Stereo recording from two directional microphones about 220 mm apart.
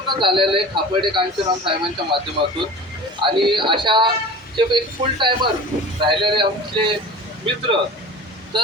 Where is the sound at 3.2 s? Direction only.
20° right (ahead or behind).